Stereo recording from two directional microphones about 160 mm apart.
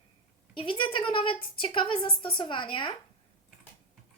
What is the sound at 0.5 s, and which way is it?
A woman's voice, 30° left (ahead or behind).